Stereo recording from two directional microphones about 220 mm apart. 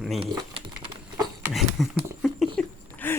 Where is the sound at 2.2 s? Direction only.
Centre (ahead or behind).